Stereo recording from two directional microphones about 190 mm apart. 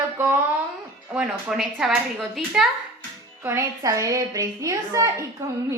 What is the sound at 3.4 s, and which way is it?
A woman's voice, 15° right (ahead or behind).